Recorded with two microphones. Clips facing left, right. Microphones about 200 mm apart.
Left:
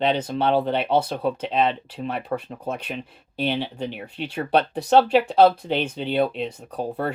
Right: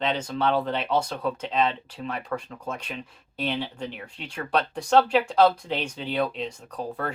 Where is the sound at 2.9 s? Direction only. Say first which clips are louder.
Left 5 dB; 30° left (ahead or behind).